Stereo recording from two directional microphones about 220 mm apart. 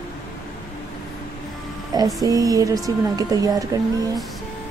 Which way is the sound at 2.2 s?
15° right (ahead or behind).